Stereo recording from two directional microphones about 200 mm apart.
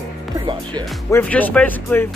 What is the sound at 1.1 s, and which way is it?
Speech, 10° left (ahead or behind).